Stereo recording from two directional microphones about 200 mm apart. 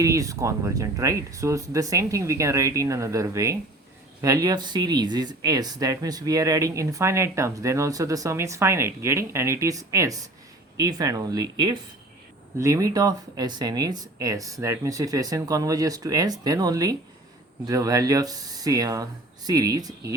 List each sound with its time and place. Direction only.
0.0 s speech: 15° right (ahead or behind)